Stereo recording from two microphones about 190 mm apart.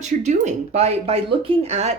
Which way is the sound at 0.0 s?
40° right (ahead or behind).